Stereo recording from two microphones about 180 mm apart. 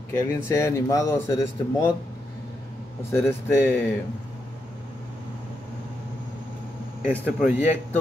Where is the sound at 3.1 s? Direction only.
15° left (ahead or behind).